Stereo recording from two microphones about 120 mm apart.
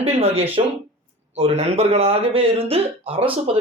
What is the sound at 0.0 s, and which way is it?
Speech, 50° right (ahead or behind).